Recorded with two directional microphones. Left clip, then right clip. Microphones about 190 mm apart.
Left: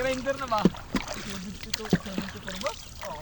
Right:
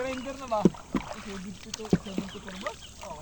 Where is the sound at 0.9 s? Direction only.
60° left (ahead or behind).